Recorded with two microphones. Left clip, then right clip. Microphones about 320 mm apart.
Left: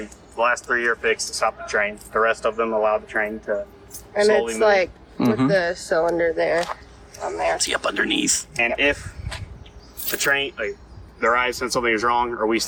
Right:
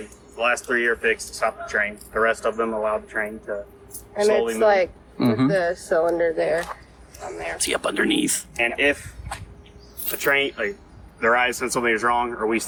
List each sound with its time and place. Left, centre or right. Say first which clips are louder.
0.3 s speech: left 1 dB; centre; by 4.9 s left
5.2 s speech: left 1 dB; centre
5.5 s speech: left 1 dB; left
7.6 s speech: left 1 dB; centre
8.5 s speech: even; left
10.2 s speech: right 1 dB; left
11.2 s speech: even; centre